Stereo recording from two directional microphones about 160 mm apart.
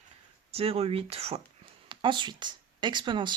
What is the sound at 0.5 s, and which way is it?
Speech, 40° right (ahead or behind).